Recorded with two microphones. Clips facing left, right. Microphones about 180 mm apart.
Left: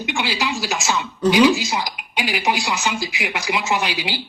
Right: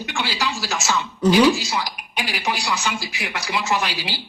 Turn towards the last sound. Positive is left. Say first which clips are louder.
# left 2 dB
turn(degrees=20)  # may be behind; listen again after turning